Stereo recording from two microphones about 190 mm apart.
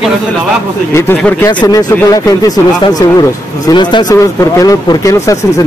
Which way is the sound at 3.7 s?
25° left (ahead or behind).